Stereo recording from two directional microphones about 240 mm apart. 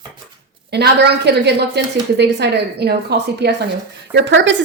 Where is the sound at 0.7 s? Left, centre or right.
Right.